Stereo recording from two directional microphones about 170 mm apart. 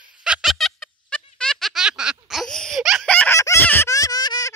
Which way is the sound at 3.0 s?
10° left (ahead or behind).